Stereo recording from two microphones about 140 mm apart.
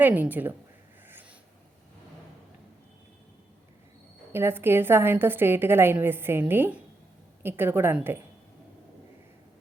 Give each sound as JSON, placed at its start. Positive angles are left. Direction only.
{"t": 0.0, "sound": "a woman's voice", "side_deg": -10}
{"t": 4.3, "sound": "a woman's voice", "side_deg": -15}